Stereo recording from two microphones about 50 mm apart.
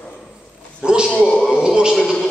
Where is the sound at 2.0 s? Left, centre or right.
Centre.